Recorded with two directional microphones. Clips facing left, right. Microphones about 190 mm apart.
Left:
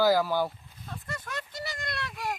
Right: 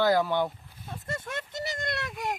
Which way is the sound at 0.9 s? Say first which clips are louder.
Right 3 dB; 25° right (ahead or behind).